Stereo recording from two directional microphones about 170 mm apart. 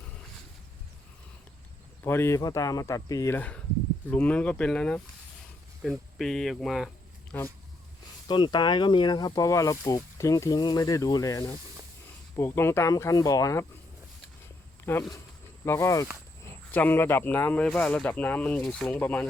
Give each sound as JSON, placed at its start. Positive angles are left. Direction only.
{"t": 2.0, "sound": "speech", "side_deg": 15}
{"t": 8.3, "sound": "speech", "side_deg": 25}
{"t": 14.9, "sound": "speech", "side_deg": 15}